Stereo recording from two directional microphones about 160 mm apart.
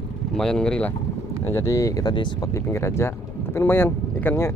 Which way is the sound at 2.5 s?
15° left (ahead or behind).